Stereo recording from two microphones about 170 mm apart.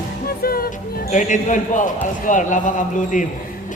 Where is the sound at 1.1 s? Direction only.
50° left (ahead or behind).